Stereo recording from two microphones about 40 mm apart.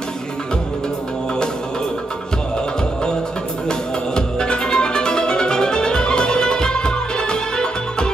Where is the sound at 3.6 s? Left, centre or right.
Centre.